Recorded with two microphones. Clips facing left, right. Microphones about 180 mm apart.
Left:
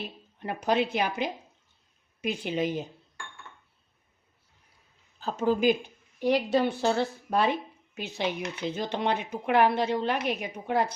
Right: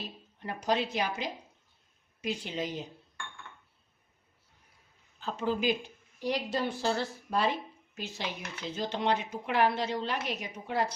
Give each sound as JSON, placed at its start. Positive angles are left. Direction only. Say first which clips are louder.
{"t": 0.4, "sound": "a woman's voice", "louder": "left 4 dB", "side_deg": 60}
{"t": 5.2, "sound": "a woman's voice", "louder": "left 6 dB", "side_deg": 45}